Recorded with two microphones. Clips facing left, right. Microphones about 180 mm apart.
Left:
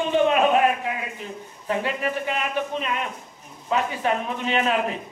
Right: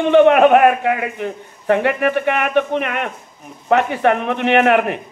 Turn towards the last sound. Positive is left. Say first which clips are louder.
# right 9 dB
turn(degrees=-65)  # may be behind; listen again after turning